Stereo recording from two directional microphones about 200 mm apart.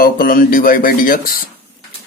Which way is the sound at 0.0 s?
45° left (ahead or behind).